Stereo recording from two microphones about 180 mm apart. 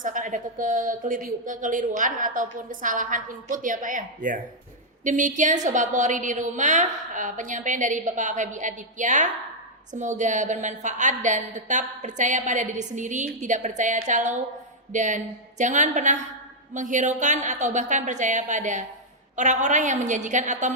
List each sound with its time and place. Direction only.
0.0 s a woman's voice: 45° right (ahead or behind)